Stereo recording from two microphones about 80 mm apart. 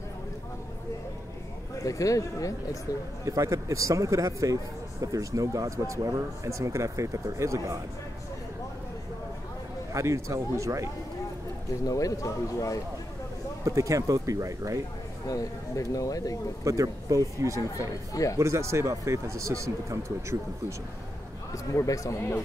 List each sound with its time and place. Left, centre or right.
1.8 s speech: left
3.3 s speech: right
9.9 s speech: right
11.8 s speech: left
13.7 s speech: right
15.2 s speech: left
16.6 s speech: right
18.1 s speech: left
18.4 s speech: right
21.7 s speech: left